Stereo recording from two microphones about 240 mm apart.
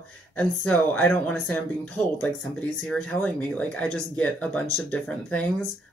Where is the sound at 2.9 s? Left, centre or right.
Centre.